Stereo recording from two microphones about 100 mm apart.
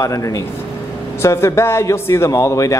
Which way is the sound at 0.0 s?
35° left (ahead or behind).